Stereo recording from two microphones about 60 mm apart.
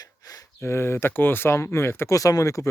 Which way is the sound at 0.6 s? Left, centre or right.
Left.